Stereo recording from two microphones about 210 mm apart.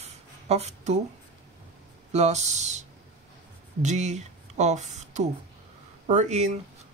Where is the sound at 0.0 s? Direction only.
30° right (ahead or behind).